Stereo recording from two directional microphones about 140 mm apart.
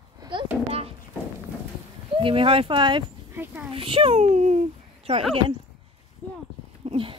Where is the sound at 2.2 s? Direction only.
40° right (ahead or behind).